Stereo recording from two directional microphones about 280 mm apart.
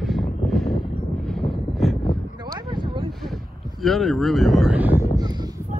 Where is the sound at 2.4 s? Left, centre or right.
Centre.